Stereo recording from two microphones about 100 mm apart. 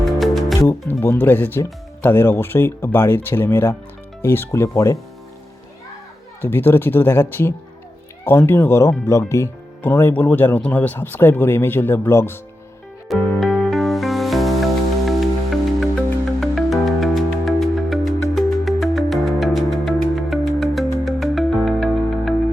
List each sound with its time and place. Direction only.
0.0 s music: centre (ahead or behind)
0.7 s speech: 25° left (ahead or behind)
6.4 s speech: 20° left (ahead or behind)
13.1 s music: 5° left (ahead or behind)
16.4 s music: centre (ahead or behind)